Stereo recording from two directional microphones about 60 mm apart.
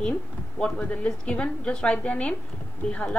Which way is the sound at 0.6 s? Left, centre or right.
Centre.